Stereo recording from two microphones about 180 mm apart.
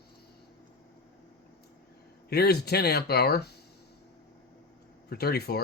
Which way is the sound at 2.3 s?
60° left (ahead or behind).